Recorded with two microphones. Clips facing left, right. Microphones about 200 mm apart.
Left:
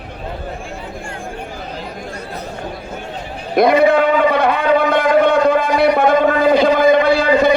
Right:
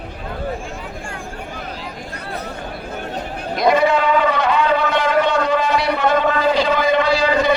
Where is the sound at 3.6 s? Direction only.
55° left (ahead or behind).